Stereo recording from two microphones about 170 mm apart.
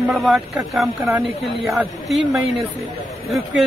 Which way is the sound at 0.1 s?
Centre (ahead or behind).